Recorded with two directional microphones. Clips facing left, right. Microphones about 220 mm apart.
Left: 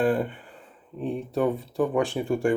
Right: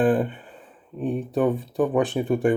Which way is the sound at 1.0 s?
15° right (ahead or behind).